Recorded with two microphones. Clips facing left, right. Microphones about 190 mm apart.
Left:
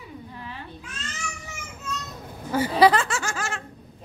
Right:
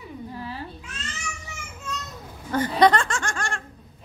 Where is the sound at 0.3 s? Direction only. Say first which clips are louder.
Right 5 dB; 35° right (ahead or behind).